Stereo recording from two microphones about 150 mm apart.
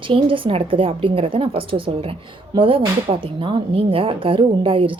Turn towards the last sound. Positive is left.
turn(degrees=-35)  # may be behind; listen again after turning